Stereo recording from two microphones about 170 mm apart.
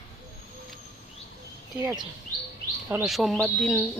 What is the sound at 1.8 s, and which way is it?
Speech, 15° right (ahead or behind).